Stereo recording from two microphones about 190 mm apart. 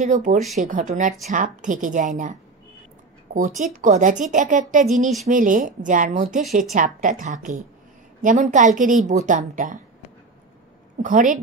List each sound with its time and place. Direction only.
0.0 s speech: 40° right (ahead or behind)
3.3 s speech: 40° right (ahead or behind)
11.0 s speech: 45° right (ahead or behind)